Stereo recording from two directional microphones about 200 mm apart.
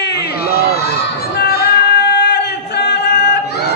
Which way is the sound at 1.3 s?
55° left (ahead or behind).